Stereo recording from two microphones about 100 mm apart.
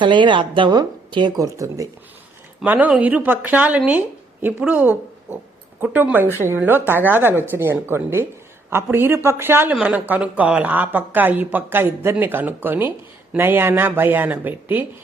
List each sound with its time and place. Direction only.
0.0 s a woman's voice: 50° right (ahead or behind)
1.4 s speech: 30° right (ahead or behind)
2.6 s speech: 15° right (ahead or behind)
9.7 s speech: 10° right (ahead or behind)